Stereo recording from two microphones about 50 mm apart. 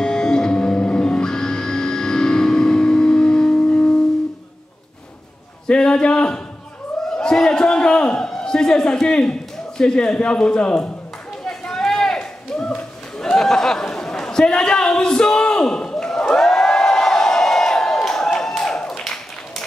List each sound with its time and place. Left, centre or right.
0.0 s music: centre
5.7 s a man's voice: centre
7.2 s a sound: centre
8.2 s a man's voice: centre
11.4 s run: centre
13.2 s a sound: centre